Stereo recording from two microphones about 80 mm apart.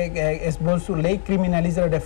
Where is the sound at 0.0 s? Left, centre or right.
Centre.